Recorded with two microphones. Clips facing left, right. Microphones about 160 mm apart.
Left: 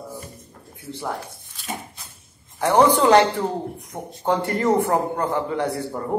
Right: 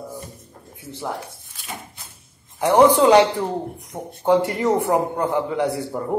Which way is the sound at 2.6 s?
15° right (ahead or behind).